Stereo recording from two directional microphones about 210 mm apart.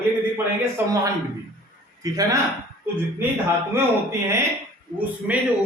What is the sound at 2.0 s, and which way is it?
Speech, 15° right (ahead or behind).